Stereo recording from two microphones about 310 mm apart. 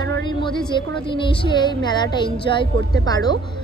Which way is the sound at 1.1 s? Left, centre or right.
Centre.